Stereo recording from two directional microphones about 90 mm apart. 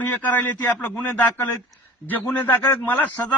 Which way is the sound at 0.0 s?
20° left (ahead or behind).